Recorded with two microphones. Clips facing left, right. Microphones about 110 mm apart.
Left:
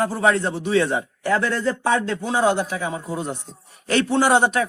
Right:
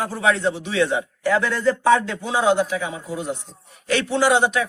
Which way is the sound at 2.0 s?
45° left (ahead or behind).